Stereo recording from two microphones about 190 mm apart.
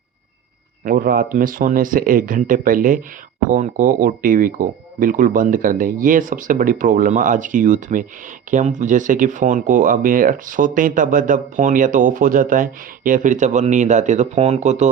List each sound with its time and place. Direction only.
0.9 s speech: 50° right (ahead or behind)